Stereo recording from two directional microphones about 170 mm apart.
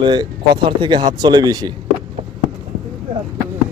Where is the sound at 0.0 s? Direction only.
25° right (ahead or behind).